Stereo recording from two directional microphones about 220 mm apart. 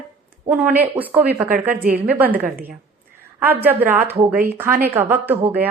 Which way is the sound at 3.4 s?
10° right (ahead or behind).